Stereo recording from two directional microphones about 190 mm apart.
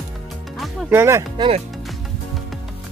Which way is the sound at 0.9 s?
15° right (ahead or behind).